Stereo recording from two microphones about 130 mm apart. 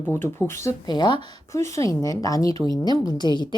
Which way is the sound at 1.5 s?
25° left (ahead or behind).